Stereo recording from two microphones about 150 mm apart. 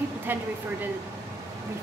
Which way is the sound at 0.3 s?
15° right (ahead or behind).